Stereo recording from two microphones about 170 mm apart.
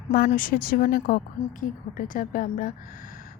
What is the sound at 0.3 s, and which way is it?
Speech, 55° left (ahead or behind).